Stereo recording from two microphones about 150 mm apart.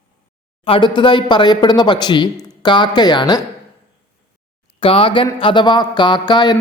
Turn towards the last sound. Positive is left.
turn(degrees=30)  # may be behind; listen again after turning